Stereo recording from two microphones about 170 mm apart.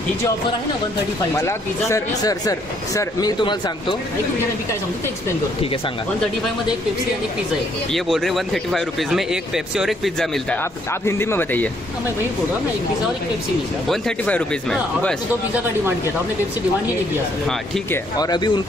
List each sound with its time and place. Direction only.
1.3 s speech: 15° left (ahead or behind)
7.9 s speech: centre (ahead or behind)
10.6 s speech: 15° left (ahead or behind)
13.8 s speech: 5° left (ahead or behind)
17.9 s speech: 20° left (ahead or behind)